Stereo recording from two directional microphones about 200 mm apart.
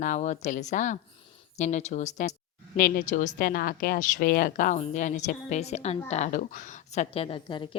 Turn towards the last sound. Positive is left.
turn(degrees=25)  # may be behind; listen again after turning